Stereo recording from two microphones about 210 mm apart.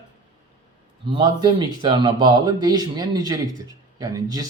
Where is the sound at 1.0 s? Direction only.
20° right (ahead or behind).